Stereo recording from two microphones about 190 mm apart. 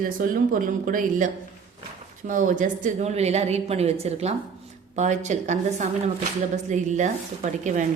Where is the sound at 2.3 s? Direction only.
45° right (ahead or behind).